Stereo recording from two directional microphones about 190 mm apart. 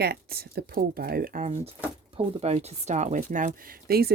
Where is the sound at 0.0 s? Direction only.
55° right (ahead or behind).